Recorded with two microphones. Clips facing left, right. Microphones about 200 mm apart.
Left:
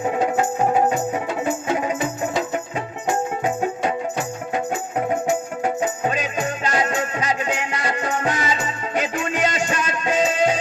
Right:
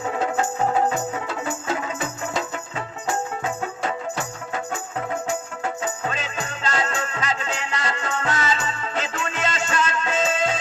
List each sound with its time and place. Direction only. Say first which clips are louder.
0.0 s music: left 4 dB; 15° left (ahead or behind)